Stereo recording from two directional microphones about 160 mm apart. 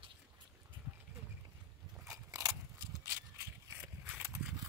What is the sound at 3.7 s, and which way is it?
Horse, 15° right (ahead or behind).